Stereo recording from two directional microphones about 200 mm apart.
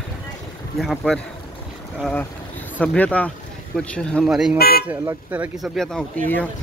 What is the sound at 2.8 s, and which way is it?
Speech, 5° left (ahead or behind).